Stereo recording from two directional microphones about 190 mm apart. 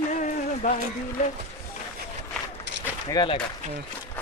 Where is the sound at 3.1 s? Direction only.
20° left (ahead or behind).